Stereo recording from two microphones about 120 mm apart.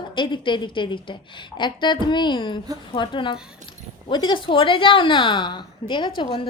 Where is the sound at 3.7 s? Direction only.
40° left (ahead or behind).